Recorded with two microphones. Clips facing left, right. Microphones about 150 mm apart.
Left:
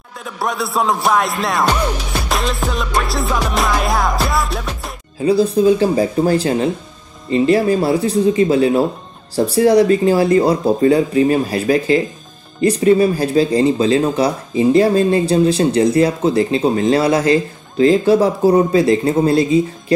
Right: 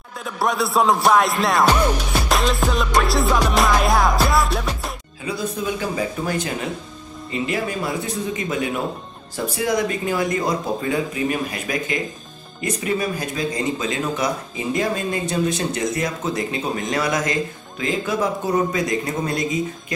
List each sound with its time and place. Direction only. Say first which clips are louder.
0.2 s music: even; centre (ahead or behind)
5.2 s speech: left 13 dB; 30° left (ahead or behind)